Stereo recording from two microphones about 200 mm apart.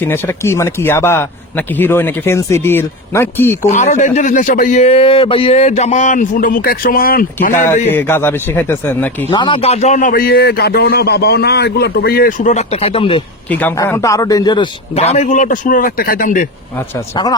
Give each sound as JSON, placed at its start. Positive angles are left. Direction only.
{"t": 0.0, "sound": "speech", "side_deg": 10}
{"t": 3.7, "sound": "speech", "side_deg": 40}
{"t": 7.5, "sound": "speech", "side_deg": 10}
{"t": 9.3, "sound": "a man's voice", "side_deg": 25}
{"t": 13.5, "sound": "speech", "side_deg": 10}